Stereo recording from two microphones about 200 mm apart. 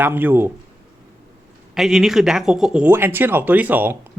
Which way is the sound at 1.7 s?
Centre (ahead or behind).